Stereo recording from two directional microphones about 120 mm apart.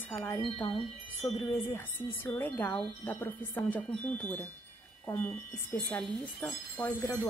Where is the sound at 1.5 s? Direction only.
20° left (ahead or behind).